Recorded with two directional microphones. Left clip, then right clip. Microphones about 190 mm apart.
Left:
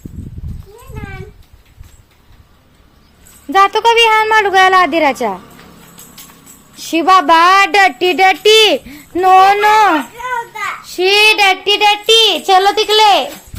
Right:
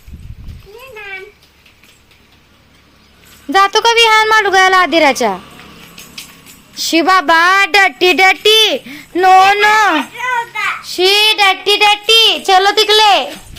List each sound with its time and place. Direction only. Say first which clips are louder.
3.5 s a woman's voice: even; 5° right (ahead or behind)
6.7 s a woman's voice: left 1 dB; 5° right (ahead or behind)
10.2 s children playing: right 3 dB; 35° left (ahead or behind)
10.8 s a woman's voice: left 1 dB; 5° left (ahead or behind)